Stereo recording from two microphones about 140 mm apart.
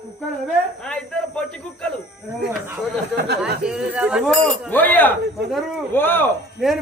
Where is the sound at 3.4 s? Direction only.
5° right (ahead or behind).